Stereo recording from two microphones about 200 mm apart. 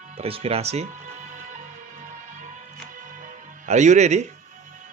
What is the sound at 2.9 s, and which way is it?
Music, 40° right (ahead or behind).